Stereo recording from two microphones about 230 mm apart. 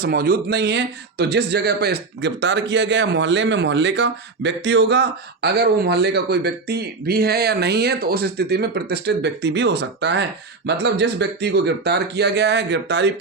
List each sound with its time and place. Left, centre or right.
0.0 s speech: right